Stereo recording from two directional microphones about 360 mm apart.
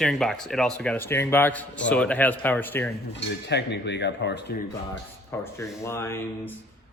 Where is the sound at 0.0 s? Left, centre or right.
Centre.